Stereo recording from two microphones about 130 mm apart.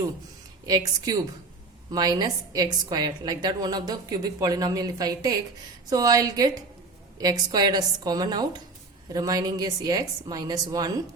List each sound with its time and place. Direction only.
0.6 s a woman's voice: 30° right (ahead or behind)